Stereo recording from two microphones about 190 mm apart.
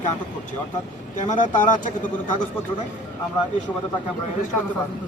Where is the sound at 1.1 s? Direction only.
40° left (ahead or behind).